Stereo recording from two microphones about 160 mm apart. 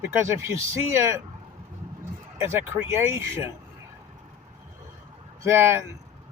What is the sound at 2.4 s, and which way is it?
Speech, 15° right (ahead or behind).